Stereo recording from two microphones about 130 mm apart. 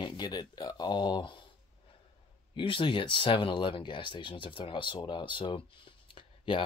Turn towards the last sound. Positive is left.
turn(degrees=40)  # may be behind; listen again after turning